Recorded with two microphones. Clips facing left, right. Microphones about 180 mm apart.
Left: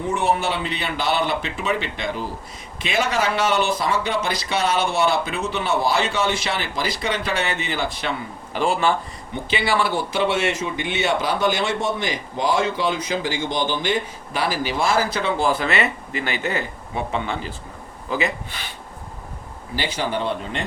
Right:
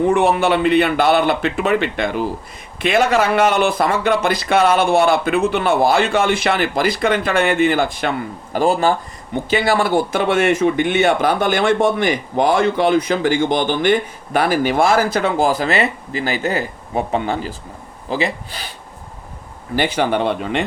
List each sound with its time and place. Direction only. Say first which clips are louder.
0.0 s speech: right 7 dB; 60° right (ahead or behind)
8.5 s speech: right 5 dB; 40° right (ahead or behind)
19.7 s speech: right 7 dB; 55° right (ahead or behind); by 20.7 s 75° right (ahead or behind)